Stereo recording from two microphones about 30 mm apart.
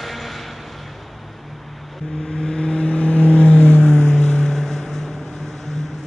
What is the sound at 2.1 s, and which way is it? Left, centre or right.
Vehicle, left.